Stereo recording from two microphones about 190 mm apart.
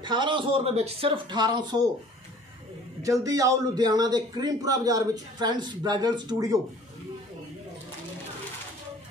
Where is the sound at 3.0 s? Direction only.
15° right (ahead or behind).